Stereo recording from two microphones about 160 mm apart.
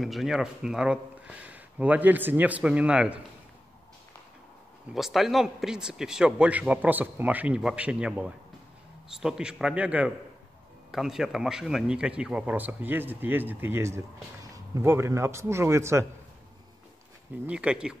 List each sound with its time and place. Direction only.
0.0 s speech: centre (ahead or behind)
4.9 s a man's voice: centre (ahead or behind); by 16.1 s 15° right (ahead or behind)
17.5 s speech: 5° right (ahead or behind)